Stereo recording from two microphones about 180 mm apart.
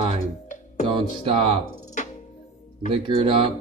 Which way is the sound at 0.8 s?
30° right (ahead or behind).